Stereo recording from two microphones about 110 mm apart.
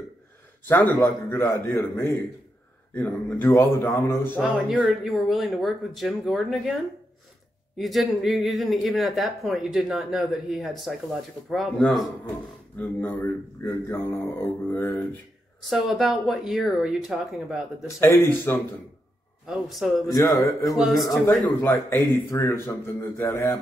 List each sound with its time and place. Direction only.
0.7 s speech: 15° left (ahead or behind)
3.4 s speech: 30° left (ahead or behind)
4.5 s speech: 10° right (ahead or behind)
12.7 s speech: 15° left (ahead or behind)
15.7 s speech: centre (ahead or behind)
17.8 s speech: 20° left (ahead or behind)
19.4 s speech: centre (ahead or behind)
20.1 s speech: 30° left (ahead or behind)
20.7 s speech: centre (ahead or behind)
21.5 s speech: 20° left (ahead or behind)